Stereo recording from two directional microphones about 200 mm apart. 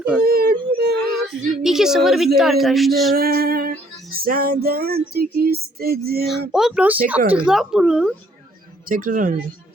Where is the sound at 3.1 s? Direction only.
50° right (ahead or behind).